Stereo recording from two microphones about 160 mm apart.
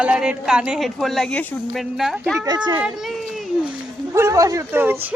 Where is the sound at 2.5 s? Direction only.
25° right (ahead or behind).